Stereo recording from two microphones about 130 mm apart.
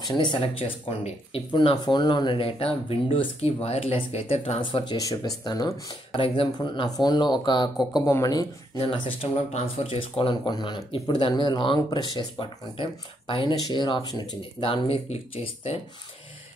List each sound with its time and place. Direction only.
0.1 s speech: 35° left (ahead or behind)
4.6 s speech: 40° left (ahead or behind)
7.9 s speech: 25° left (ahead or behind)
8.7 s speech: 45° left (ahead or behind)